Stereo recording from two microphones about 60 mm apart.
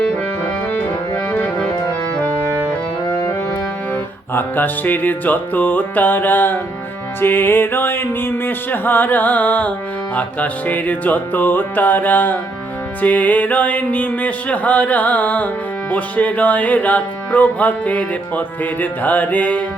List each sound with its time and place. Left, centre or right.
4.4 s music: left